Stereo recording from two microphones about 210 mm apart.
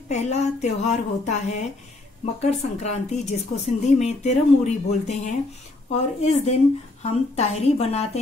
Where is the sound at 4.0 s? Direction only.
30° left (ahead or behind).